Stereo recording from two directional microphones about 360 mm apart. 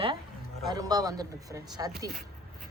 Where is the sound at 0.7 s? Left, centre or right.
Centre.